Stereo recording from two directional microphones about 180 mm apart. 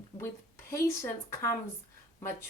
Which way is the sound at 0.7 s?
15° left (ahead or behind).